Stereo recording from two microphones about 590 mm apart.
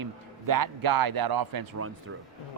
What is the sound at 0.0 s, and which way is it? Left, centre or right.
A man's voice, right.